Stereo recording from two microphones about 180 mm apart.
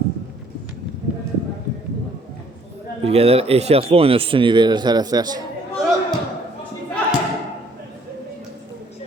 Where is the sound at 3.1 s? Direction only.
35° right (ahead or behind).